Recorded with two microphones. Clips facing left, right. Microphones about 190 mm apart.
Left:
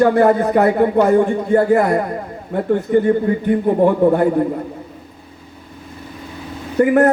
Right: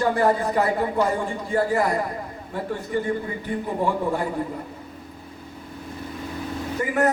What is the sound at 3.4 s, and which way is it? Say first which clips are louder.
Speech: left 10 dB; 55° left (ahead or behind).